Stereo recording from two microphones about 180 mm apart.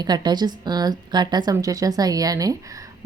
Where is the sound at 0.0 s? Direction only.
25° right (ahead or behind).